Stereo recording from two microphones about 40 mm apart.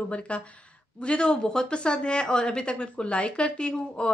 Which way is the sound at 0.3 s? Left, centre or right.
Left.